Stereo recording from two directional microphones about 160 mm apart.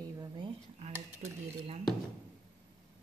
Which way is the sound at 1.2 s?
40° right (ahead or behind).